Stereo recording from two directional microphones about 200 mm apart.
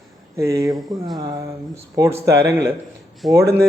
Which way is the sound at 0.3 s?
15° right (ahead or behind).